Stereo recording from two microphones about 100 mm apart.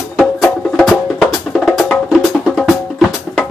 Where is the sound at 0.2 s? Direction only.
Centre (ahead or behind).